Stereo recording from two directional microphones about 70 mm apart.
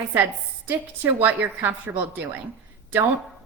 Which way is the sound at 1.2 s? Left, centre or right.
Right.